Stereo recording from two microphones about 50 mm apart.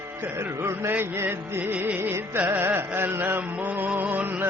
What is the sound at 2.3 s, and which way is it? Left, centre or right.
Music, right.